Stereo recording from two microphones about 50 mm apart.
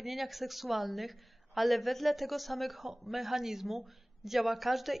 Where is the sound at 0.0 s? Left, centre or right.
Centre.